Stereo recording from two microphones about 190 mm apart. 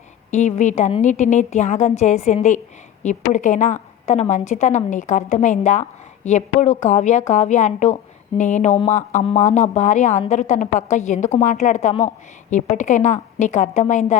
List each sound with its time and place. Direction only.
0.3 s speech: 40° left (ahead or behind)